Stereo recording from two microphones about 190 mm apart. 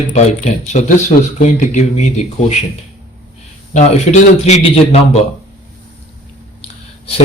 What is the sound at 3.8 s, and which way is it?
Speech, 35° left (ahead or behind).